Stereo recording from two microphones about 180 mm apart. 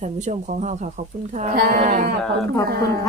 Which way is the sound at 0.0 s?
40° right (ahead or behind).